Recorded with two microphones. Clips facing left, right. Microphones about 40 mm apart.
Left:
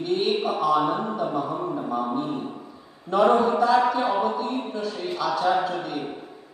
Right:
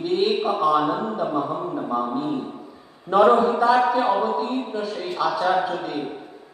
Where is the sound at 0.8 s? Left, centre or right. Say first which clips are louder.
Right 1 dB; centre.